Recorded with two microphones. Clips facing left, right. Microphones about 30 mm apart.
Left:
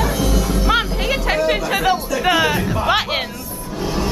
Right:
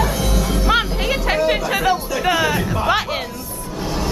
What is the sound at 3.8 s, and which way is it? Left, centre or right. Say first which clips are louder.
Music: left 2 dB; centre.